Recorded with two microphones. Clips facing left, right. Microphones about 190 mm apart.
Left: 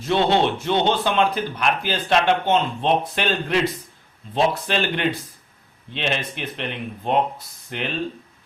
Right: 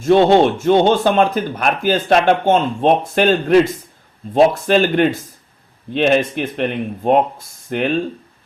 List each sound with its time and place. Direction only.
0.0 s speech: 45° right (ahead or behind)